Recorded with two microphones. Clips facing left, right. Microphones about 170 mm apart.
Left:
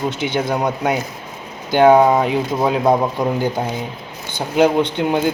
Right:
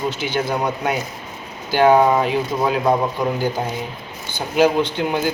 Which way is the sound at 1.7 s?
15° left (ahead or behind).